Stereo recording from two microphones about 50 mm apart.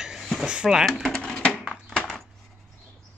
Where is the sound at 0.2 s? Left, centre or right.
Centre.